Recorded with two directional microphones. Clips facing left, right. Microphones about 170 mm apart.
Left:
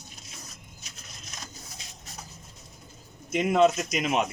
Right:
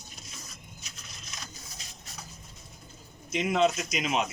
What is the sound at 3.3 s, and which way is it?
Speech, 50° left (ahead or behind).